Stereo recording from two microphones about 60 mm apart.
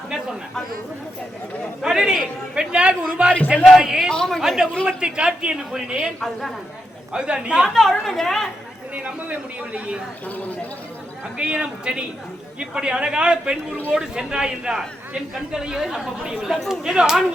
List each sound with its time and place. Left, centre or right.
1.8 s a man's voice: centre
3.8 s speech: centre
4.1 s speech: centre
4.4 s speech: centre
4.9 s a man's voice: centre
6.1 s speech: centre
7.1 s a man's voice: centre
7.7 s speech: centre
9.0 s a man's voice: right
11.3 s a man's voice: centre